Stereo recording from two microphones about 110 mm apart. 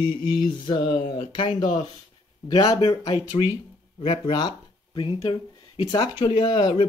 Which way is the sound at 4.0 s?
50° left (ahead or behind).